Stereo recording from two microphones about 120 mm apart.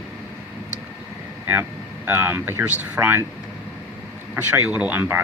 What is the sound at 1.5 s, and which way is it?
Speech, 15° right (ahead or behind).